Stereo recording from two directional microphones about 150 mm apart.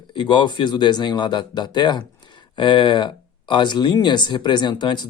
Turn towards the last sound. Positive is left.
turn(degrees=30)  # may be behind; listen again after turning